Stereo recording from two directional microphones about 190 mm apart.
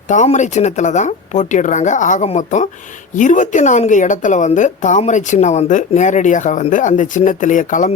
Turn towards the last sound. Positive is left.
turn(degrees=45)  # may be behind; listen again after turning